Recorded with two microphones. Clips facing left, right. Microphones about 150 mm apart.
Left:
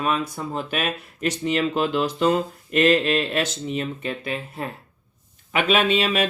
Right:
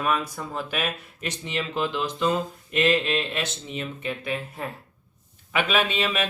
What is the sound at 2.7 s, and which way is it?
Speech, 40° left (ahead or behind).